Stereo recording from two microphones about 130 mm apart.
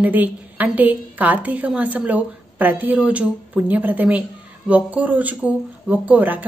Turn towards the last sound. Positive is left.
turn(degrees=-10)  # may be behind; listen again after turning